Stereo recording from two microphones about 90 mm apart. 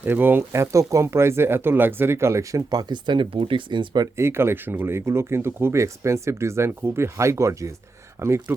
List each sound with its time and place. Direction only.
0.0 s speech: 20° right (ahead or behind); by 4.1 s 55° right (ahead or behind)
4.2 s speech: 25° right (ahead or behind)